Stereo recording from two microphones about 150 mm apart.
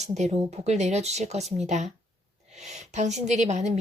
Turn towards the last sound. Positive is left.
turn(degrees=-50)  # may be behind; listen again after turning